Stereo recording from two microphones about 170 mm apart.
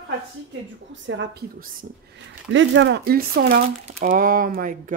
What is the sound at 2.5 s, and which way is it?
Speech, 90° right.